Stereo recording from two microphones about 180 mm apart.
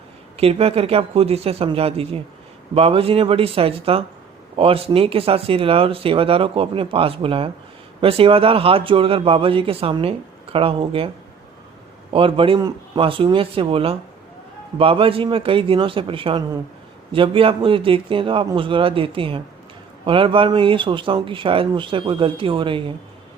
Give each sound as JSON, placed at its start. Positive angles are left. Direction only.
{"t": 0.3, "sound": "speech", "side_deg": -35}
{"t": 12.1, "sound": "speech", "side_deg": -30}